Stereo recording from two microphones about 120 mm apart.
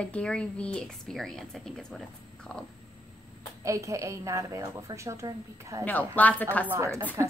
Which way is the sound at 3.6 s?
25° right (ahead or behind).